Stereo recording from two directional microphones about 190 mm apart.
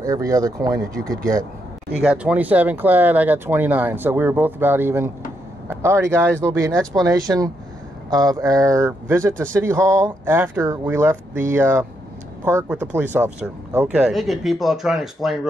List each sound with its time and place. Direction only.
0.0 s speech: 15° right (ahead or behind)
2.0 s speech: 5° right (ahead or behind)